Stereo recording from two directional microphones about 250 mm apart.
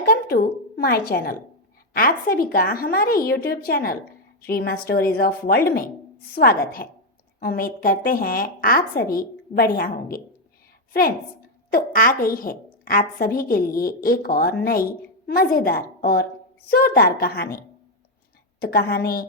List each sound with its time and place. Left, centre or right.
0.0 s a woman's voice: left
11.7 s a woman's voice: left
18.6 s a woman's voice: left